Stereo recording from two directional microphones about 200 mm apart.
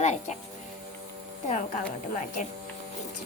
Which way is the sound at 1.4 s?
35° left (ahead or behind).